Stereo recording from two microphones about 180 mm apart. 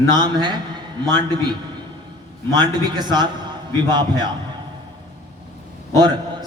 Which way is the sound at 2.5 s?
25° right (ahead or behind).